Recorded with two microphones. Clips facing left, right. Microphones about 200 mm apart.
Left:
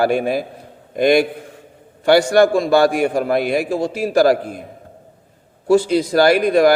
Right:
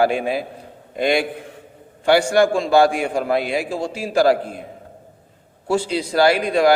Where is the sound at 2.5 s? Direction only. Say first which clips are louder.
Left 1 dB; 40° left (ahead or behind).